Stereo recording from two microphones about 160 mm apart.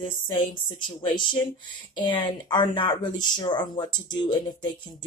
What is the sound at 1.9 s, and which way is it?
Speech, 30° left (ahead or behind).